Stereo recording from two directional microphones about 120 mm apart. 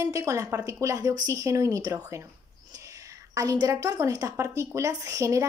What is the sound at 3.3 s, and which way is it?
Speech, 30° right (ahead or behind).